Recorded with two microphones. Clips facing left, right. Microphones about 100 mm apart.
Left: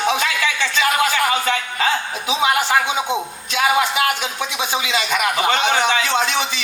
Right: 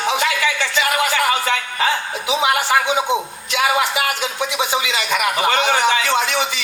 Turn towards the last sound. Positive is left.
turn(degrees=20)  # may be behind; listen again after turning